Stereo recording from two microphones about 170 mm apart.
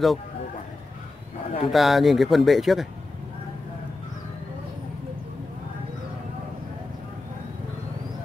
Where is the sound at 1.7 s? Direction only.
Centre (ahead or behind).